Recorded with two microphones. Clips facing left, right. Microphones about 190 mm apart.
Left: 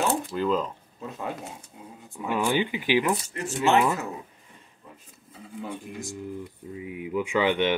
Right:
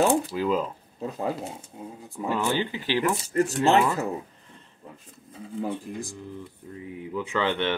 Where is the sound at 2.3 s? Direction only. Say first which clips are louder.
Left 2 dB; 15° left (ahead or behind).